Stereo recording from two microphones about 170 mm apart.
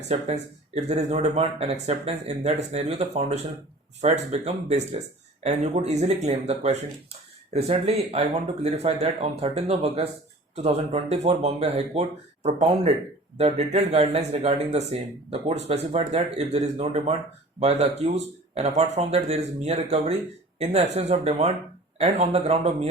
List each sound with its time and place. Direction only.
0.1 s speech: 40° right (ahead or behind)